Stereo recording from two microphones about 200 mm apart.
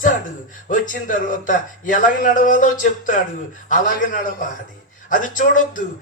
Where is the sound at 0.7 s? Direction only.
40° left (ahead or behind).